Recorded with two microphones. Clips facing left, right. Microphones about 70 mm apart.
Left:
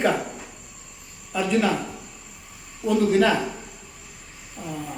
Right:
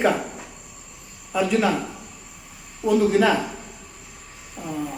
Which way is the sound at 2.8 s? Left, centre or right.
Centre.